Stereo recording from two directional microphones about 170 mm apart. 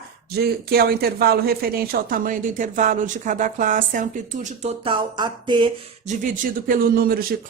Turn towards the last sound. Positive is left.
turn(degrees=-60)  # may be behind; listen again after turning